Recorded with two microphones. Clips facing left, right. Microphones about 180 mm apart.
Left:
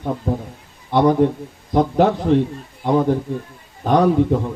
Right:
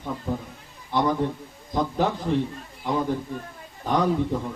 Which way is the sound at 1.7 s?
65° left (ahead or behind).